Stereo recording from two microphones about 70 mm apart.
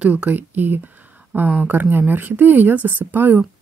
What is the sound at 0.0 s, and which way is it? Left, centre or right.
Speech, right.